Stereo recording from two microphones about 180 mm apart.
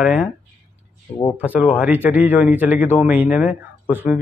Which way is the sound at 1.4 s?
10° right (ahead or behind).